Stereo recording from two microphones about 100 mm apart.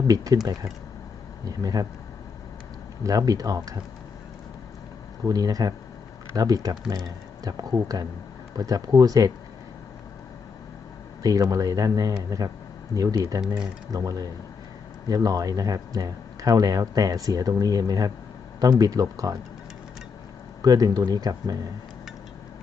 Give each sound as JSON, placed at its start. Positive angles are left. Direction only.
{"t": 0.4, "sound": "speech", "side_deg": -40}
{"t": 3.0, "sound": "speech", "side_deg": -35}
{"t": 5.3, "sound": "speech", "side_deg": -40}
{"t": 11.2, "sound": "speech", "side_deg": -40}
{"t": 20.6, "sound": "speech", "side_deg": -40}